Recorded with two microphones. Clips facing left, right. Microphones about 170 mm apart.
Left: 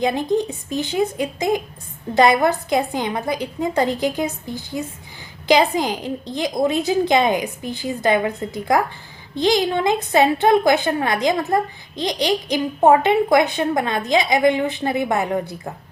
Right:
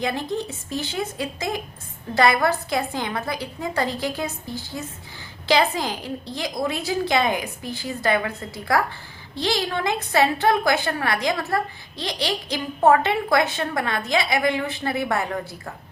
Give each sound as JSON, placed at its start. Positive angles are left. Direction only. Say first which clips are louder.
{"t": 0.0, "sound": "a woman's voice", "louder": "left 6 dB", "side_deg": 20}